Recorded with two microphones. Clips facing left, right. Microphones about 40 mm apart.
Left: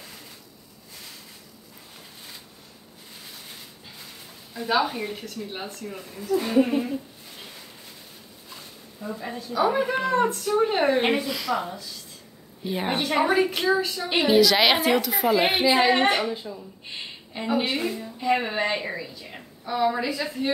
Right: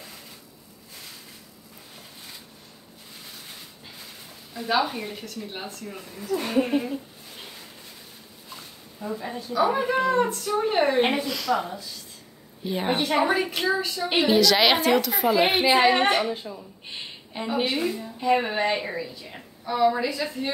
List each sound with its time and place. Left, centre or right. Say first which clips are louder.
4.6 s a woman's voice: left 1 dB; centre
6.3 s a woman's voice: left 2 dB; right
8.5 s a sound: right 1 dB; centre
9.5 s a woman's voice: even; centre
12.6 s a woman's voice: right 1 dB; centre
17.6 s a woman's voice: right 2 dB; centre